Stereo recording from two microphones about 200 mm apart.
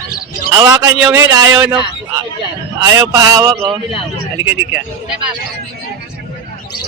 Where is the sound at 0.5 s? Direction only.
20° right (ahead or behind).